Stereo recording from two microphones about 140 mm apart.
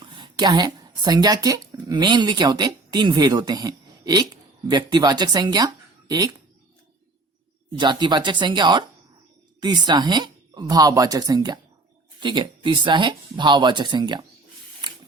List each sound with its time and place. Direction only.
0.0 s speech: 35° right (ahead or behind)
7.8 s speech: 30° right (ahead or behind)